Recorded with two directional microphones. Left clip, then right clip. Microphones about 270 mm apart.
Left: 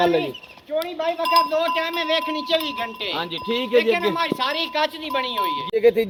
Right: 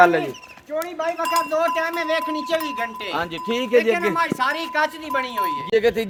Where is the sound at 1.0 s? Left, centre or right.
Right.